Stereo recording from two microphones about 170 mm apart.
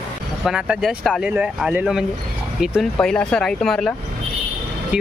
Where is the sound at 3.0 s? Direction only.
5° left (ahead or behind).